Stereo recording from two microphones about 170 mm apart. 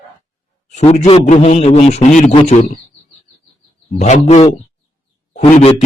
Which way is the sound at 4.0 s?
40° left (ahead or behind).